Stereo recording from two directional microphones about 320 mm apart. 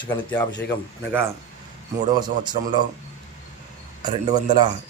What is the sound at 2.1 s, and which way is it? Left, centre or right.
Speech, centre.